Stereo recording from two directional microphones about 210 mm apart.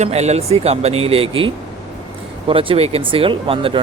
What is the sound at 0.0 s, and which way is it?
Speech, 30° right (ahead or behind).